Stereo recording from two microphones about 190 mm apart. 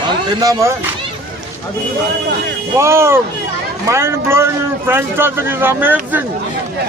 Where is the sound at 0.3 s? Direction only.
20° right (ahead or behind).